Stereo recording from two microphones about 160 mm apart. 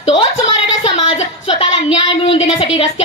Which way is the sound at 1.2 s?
40° left (ahead or behind).